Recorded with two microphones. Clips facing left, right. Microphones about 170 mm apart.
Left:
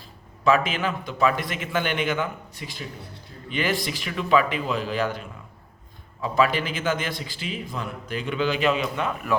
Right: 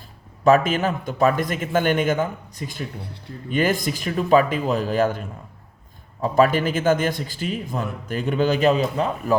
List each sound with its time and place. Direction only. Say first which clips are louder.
0.4 s a man's voice: right 5 dB; 45° right (ahead or behind)
6.2 s a man's voice: right 5 dB; 45° right (ahead or behind)